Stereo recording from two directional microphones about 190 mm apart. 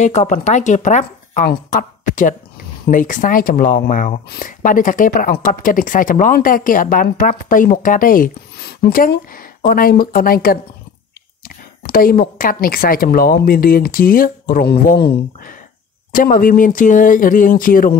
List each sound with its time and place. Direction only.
0.0 s a woman's voice: 40° left (ahead or behind)